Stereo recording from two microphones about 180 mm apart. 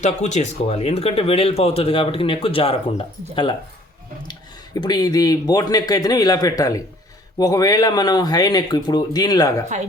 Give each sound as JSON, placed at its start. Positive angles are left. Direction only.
{"t": 0.0, "sound": "speech", "side_deg": 40}
{"t": 4.2, "sound": "speech", "side_deg": 25}